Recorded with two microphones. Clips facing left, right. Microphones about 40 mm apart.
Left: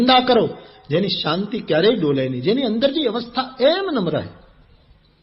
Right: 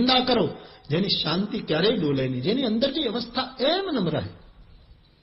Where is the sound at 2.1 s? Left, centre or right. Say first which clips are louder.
Left 6 dB; left.